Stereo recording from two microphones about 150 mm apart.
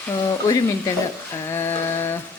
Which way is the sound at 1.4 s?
15° left (ahead or behind).